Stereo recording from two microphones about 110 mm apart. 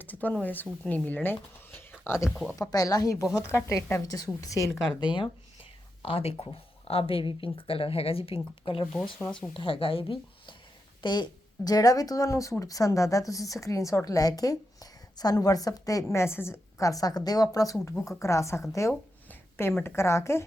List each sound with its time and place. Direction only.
0.0 s a woman's voice: 15° left (ahead or behind)
4.9 s speech: 45° left (ahead or behind)
6.0 s speech: 60° left (ahead or behind)
11.0 s speech: 40° left (ahead or behind); by 20.4 s 25° left (ahead or behind)